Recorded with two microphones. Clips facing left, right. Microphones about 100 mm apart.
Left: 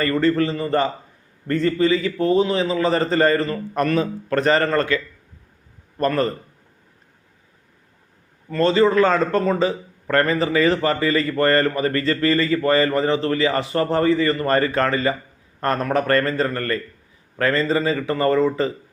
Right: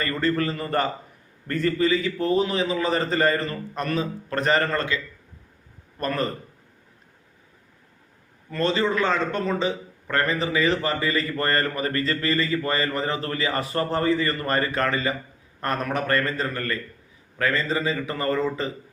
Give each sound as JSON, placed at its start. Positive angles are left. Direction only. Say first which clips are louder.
{"t": 0.0, "sound": "a man's voice", "louder": "left 6 dB", "side_deg": 30}
{"t": 6.0, "sound": "a man's voice", "louder": "left 7 dB", "side_deg": 35}
{"t": 8.4, "sound": "a man's voice", "louder": "left 7 dB", "side_deg": 35}